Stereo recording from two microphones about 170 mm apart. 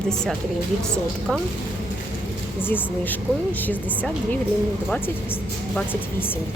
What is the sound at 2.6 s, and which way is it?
Speech, 10° left (ahead or behind).